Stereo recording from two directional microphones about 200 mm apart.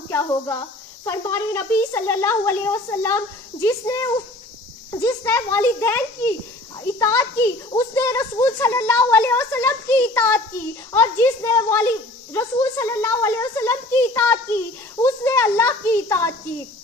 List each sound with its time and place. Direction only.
0.1 s a woman's voice: 10° left (ahead or behind)